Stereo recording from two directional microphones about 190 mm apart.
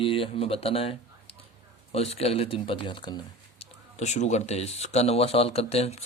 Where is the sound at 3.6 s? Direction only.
35° left (ahead or behind).